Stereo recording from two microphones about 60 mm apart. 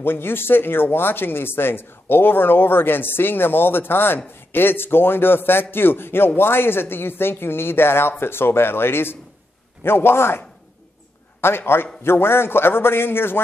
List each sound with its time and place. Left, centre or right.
0.0 s a man's voice: left
11.4 s a man's voice: left